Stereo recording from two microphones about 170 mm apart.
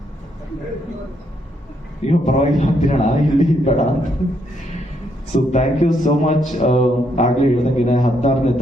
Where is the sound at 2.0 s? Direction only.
40° left (ahead or behind).